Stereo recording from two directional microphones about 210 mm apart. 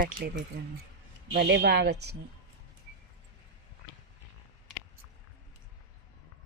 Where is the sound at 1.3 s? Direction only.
55° right (ahead or behind).